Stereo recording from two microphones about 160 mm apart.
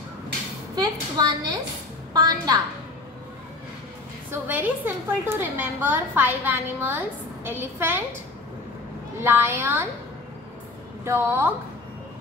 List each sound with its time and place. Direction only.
0.7 s a woman's voice: 25° right (ahead or behind)
4.3 s a woman's voice: 10° right (ahead or behind)
9.2 s a woman's voice: 15° right (ahead or behind)
11.1 s a woman's voice: 15° right (ahead or behind)